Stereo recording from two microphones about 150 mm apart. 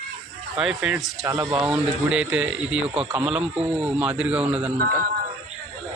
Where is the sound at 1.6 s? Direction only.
5° right (ahead or behind).